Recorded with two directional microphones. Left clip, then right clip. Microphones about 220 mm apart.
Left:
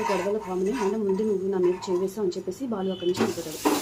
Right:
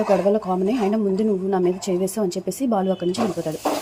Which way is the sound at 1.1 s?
35° right (ahead or behind).